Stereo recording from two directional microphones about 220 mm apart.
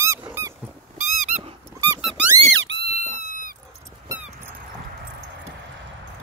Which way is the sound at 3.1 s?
40° left (ahead or behind).